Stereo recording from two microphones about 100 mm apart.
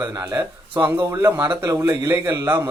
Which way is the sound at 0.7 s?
25° right (ahead or behind).